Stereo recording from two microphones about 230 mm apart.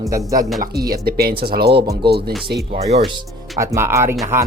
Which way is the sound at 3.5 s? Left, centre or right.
Centre.